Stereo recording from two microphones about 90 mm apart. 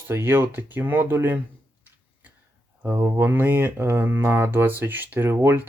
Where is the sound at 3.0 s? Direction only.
25° right (ahead or behind).